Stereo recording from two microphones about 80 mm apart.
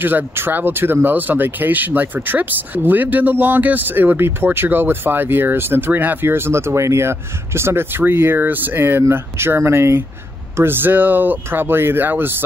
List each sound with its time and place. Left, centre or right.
0.0 s speech: right